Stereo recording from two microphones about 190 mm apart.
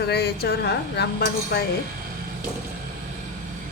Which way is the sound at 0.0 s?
60° left (ahead or behind).